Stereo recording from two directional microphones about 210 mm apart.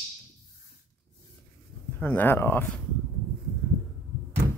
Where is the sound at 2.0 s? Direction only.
10° left (ahead or behind).